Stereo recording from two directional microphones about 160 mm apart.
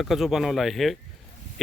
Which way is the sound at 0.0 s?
Centre (ahead or behind).